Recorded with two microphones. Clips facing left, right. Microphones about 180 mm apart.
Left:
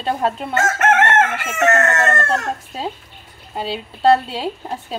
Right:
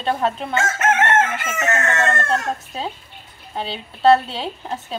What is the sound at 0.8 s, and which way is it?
Chicken, 65° left (ahead or behind).